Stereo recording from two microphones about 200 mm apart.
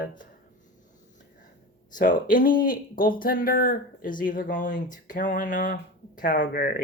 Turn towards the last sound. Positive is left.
turn(degrees=45)  # may be behind; listen again after turning